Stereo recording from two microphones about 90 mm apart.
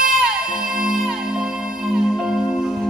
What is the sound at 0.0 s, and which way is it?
Music, 5° right (ahead or behind).